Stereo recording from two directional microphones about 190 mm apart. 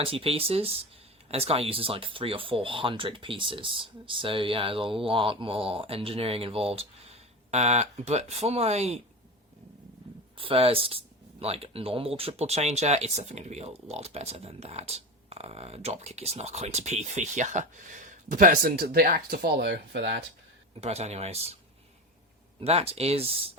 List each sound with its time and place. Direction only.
0.0 s speech: 30° right (ahead or behind)
10.3 s speech: 30° right (ahead or behind); by 20.2 s 65° right (ahead or behind)
20.8 s speech: 35° right (ahead or behind)
22.6 s speech: 30° right (ahead or behind)